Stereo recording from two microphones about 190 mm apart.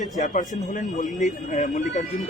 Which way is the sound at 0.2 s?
40° left (ahead or behind).